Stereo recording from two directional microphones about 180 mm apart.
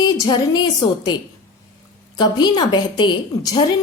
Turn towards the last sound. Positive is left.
turn(degrees=20)  # may be behind; listen again after turning